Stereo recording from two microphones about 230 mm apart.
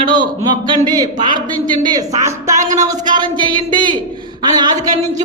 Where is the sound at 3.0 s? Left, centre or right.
Centre.